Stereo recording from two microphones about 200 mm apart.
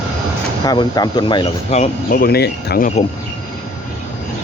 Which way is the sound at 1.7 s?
40° left (ahead or behind).